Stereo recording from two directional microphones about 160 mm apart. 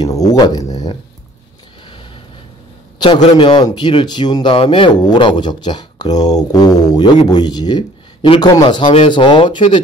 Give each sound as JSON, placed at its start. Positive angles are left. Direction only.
{"t": 0.0, "sound": "speech", "side_deg": 25}
{"t": 3.2, "sound": "a man's voice", "side_deg": 40}